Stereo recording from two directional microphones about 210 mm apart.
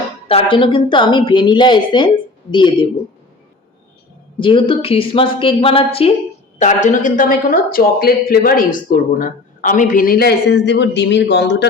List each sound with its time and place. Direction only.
0.3 s speech: 25° left (ahead or behind)
4.4 s speech: 25° left (ahead or behind); by 11.7 s 55° left (ahead or behind)